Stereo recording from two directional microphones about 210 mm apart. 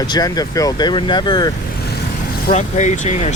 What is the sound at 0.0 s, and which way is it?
Speech, 20° left (ahead or behind).